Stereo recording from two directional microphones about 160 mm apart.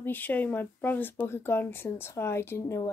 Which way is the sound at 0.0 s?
10° left (ahead or behind).